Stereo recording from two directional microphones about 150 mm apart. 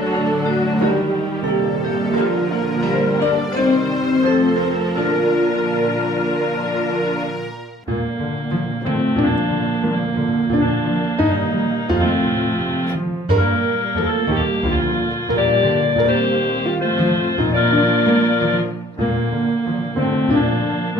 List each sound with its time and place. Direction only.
0.5 s music: centre (ahead or behind)
5.1 s music: centre (ahead or behind)
12.1 s music: 15° left (ahead or behind)
17.7 s music: 15° left (ahead or behind)